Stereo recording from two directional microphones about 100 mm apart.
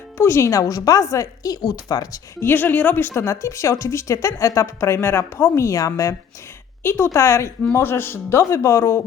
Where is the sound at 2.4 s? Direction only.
20° left (ahead or behind).